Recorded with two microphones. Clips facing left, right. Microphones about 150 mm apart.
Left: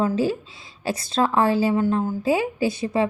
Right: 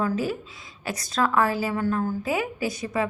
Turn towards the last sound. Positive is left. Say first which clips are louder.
# left 5 dB
turn(degrees=30)  # may be behind; listen again after turning